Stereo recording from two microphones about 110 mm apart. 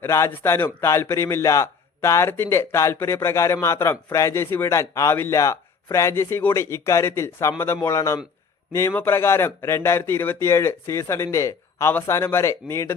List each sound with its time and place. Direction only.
0.0 s a man's voice: 25° left (ahead or behind)
8.9 s a man's voice: 20° left (ahead or behind)